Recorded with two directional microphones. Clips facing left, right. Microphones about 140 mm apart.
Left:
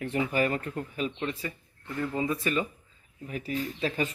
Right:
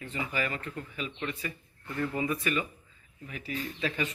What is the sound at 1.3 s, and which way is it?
Speech, 30° left (ahead or behind).